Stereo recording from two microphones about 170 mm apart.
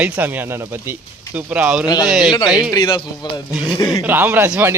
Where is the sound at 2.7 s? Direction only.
30° left (ahead or behind).